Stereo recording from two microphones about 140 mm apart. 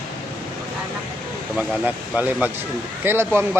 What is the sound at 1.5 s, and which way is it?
Speech, 10° right (ahead or behind).